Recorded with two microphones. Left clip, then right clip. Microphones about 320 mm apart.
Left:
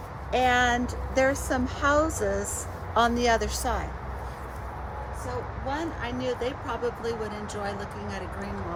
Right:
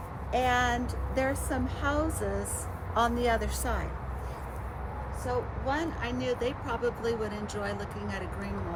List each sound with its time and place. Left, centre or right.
0.3 s speech: left; by 3.8 s centre
5.6 s speech: centre